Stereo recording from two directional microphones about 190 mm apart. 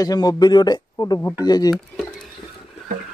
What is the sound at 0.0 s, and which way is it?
A man's voice, 20° left (ahead or behind).